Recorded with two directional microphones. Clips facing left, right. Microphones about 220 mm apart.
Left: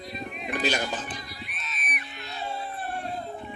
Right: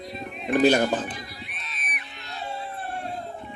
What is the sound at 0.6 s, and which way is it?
Speech, 55° right (ahead or behind).